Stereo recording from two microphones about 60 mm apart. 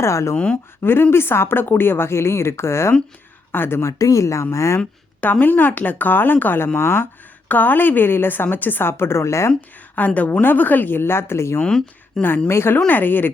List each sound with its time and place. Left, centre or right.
0.0 s speech: left
0.3 s speech: left
1.1 s a woman's voice: left
3.5 s a woman's voice: left
3.9 s speech: left
5.2 s a woman's voice: left
7.4 s a woman's voice: left
9.6 s a woman's voice: left
11.6 s speech: centre
12.5 s a woman's voice: left
12.9 s a woman's voice: left